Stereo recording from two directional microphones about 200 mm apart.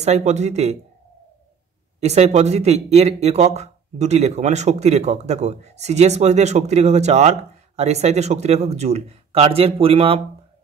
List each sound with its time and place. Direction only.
0.0 s speech: 35° right (ahead or behind)
2.0 s speech: 35° right (ahead or behind)